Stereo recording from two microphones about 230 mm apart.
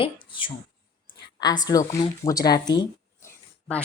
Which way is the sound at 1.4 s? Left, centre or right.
Centre.